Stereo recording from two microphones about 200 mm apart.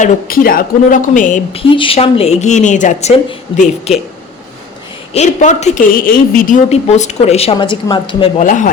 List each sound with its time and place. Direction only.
0.0 s a woman's voice: 45° left (ahead or behind)
1.5 s a woman's voice: 25° left (ahead or behind)
5.1 s a woman's voice: 35° left (ahead or behind)
8.4 s a woman's voice: 40° left (ahead or behind)